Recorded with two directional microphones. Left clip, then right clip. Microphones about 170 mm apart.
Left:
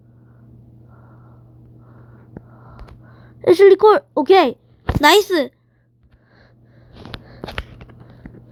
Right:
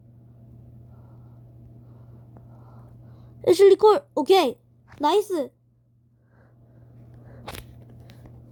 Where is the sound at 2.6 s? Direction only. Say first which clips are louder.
Left 8 dB; 10° right (ahead or behind).